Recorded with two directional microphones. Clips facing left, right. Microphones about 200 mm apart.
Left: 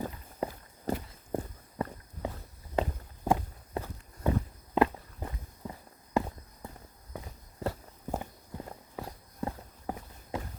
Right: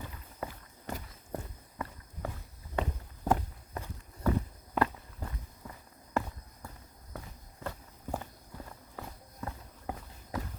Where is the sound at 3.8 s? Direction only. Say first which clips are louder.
Left 6 dB; 30° left (ahead or behind).